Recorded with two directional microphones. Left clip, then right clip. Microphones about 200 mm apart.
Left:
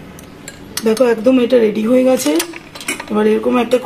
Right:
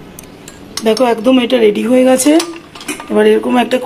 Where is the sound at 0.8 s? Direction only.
30° right (ahead or behind).